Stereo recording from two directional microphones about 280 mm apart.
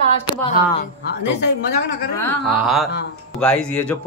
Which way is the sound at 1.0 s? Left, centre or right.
Left.